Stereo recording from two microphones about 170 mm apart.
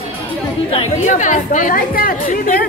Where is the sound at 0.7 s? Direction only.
40° left (ahead or behind).